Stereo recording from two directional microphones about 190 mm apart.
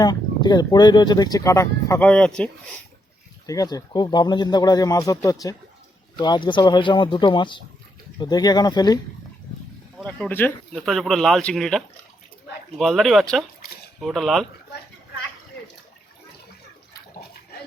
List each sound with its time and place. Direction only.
0.0 s speech: 20° left (ahead or behind); by 2.7 s 5° left (ahead or behind)
3.4 s speech: 20° left (ahead or behind)
10.0 s speech: 5° left (ahead or behind)
12.8 s speech: centre (ahead or behind)